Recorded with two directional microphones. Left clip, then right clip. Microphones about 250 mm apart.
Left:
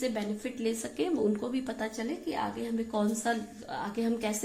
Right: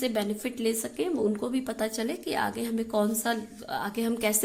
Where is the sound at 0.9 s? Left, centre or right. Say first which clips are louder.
Right 2 dB; centre.